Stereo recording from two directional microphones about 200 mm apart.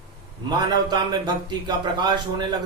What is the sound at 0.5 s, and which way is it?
A man's voice, 20° right (ahead or behind).